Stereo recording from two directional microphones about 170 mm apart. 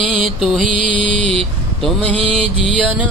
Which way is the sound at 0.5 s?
50° right (ahead or behind).